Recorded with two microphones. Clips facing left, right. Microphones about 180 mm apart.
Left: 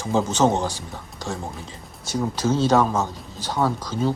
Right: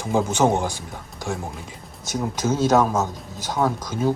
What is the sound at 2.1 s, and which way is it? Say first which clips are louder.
Speech: left 1 dB; 15° right (ahead or behind).